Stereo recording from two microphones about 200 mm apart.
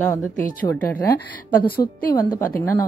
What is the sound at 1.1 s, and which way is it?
Speech, 50° left (ahead or behind).